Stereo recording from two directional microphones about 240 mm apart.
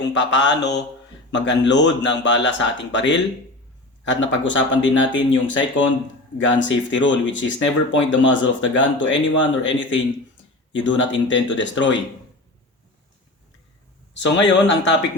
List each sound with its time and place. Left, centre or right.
0.0 s speech: left
14.1 s speech: left